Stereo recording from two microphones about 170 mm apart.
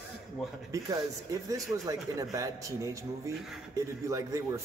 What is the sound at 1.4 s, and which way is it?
A man's voice, 20° right (ahead or behind).